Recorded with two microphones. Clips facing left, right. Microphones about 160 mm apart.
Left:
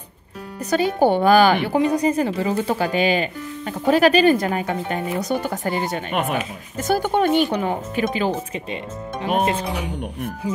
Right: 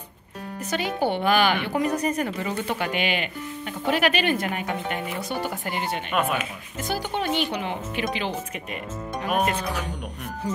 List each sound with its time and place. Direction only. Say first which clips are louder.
0.7 s a woman's voice: left 8 dB; 45° left (ahead or behind)
9.2 s speech: left 4 dB; 25° left (ahead or behind)